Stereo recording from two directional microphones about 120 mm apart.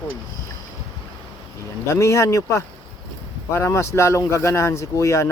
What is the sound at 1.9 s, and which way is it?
Speech, 25° left (ahead or behind).